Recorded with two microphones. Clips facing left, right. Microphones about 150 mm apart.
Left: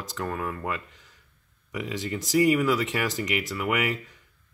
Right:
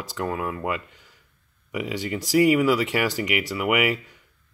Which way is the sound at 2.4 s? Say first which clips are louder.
Right 3 dB; 5° right (ahead or behind).